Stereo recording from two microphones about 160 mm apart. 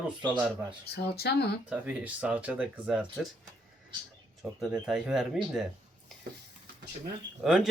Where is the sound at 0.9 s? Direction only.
85° left.